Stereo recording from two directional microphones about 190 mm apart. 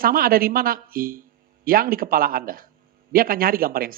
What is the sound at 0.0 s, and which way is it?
Speech, 50° right (ahead or behind).